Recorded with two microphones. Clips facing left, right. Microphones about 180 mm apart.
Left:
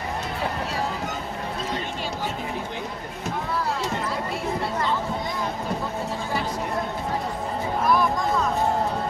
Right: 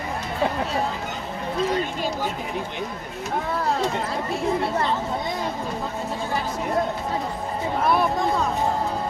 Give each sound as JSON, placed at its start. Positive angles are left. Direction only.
{"t": 7.9, "sound": "speech", "side_deg": -30}